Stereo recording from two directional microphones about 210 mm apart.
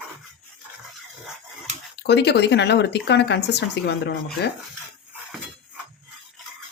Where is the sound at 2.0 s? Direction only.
55° left (ahead or behind).